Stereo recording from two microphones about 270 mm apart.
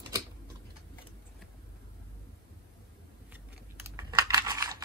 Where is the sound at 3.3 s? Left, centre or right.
Centre.